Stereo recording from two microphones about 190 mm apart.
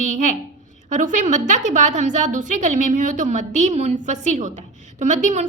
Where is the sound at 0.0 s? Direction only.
40° right (ahead or behind).